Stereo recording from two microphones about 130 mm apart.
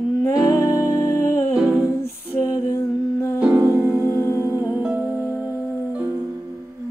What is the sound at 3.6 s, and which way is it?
Music, 25° right (ahead or behind).